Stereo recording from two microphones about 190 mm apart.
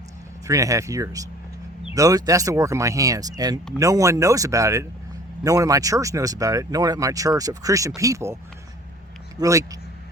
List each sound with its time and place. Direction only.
0.4 s speech: 15° right (ahead or behind)
9.4 s speech: 15° right (ahead or behind)